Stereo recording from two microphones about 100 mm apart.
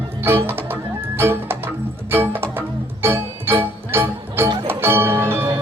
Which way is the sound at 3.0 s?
20° right (ahead or behind).